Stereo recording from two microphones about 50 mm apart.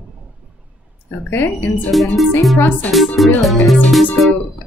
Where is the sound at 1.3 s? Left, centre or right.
Left.